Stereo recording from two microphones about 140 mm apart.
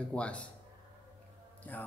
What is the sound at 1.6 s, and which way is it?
Music, 15° left (ahead or behind).